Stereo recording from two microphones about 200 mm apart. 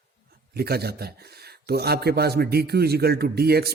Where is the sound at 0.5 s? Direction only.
50° right (ahead or behind).